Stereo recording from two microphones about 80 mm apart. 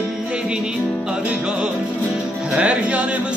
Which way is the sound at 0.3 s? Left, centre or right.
Centre.